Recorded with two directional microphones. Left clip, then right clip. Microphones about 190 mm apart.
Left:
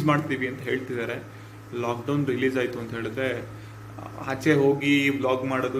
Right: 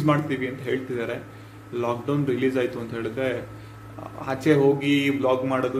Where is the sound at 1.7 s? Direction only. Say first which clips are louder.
Right 2 dB; 15° right (ahead or behind).